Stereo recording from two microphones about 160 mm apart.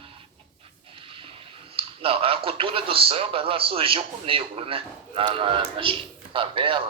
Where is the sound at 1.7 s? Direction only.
35° right (ahead or behind).